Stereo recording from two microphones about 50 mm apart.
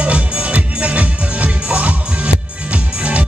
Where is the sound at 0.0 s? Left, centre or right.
Right.